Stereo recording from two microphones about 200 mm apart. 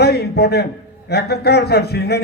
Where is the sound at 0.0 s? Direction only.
55° left (ahead or behind).